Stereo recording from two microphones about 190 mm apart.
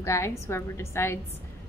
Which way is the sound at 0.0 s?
15° left (ahead or behind).